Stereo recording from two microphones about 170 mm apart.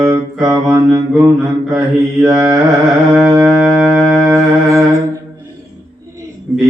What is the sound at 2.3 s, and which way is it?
Carnatic music, 20° right (ahead or behind).